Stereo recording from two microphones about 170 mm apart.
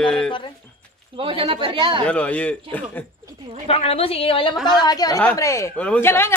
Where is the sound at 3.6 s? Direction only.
35° left (ahead or behind).